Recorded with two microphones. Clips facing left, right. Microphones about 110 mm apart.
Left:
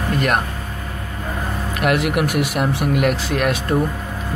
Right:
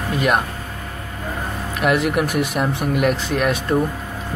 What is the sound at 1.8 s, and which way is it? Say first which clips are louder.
Speech: even; 5° left (ahead or behind).